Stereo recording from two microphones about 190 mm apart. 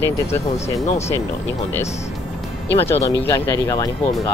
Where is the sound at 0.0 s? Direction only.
15° left (ahead or behind).